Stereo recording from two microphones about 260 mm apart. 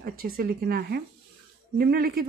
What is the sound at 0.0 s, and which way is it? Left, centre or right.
A woman's voice, right.